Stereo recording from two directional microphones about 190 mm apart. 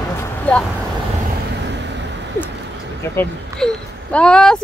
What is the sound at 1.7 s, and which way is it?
Vehicle, 65° right (ahead or behind).